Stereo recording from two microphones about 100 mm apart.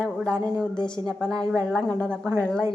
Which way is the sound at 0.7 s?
10° left (ahead or behind).